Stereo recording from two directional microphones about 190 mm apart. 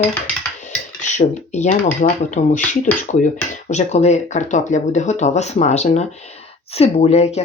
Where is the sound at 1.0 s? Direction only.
40° left (ahead or behind).